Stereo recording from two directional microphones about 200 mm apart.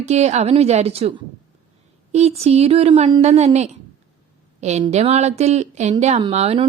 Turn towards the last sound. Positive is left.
turn(degrees=-30)  # may be behind; listen again after turning